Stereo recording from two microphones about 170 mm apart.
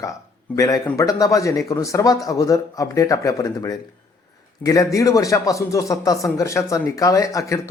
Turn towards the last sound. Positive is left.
turn(degrees=20)  # may be behind; listen again after turning